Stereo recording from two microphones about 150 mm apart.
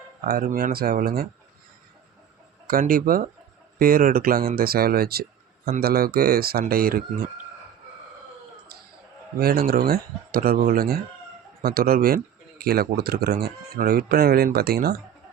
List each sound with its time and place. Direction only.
0.3 s speech: 75° right (ahead or behind)
2.6 s speech: 70° right (ahead or behind)
8.7 s a sound: 90° right
9.4 s speech: 90° right